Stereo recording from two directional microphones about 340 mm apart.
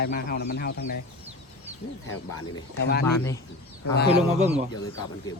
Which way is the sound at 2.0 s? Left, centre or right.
Left.